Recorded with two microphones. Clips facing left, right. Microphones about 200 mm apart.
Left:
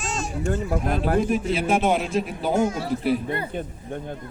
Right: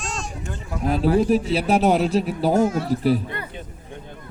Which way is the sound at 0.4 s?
45° left (ahead or behind).